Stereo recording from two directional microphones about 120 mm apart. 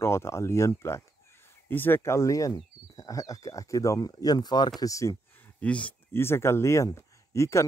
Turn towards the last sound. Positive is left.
turn(degrees=25)  # may be behind; listen again after turning